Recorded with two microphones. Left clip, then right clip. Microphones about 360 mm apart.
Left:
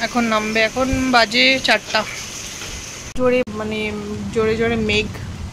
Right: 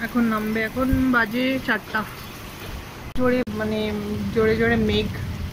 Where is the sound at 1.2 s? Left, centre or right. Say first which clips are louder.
Left 11 dB; left.